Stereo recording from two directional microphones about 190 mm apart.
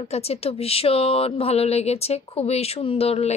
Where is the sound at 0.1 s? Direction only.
30° left (ahead or behind).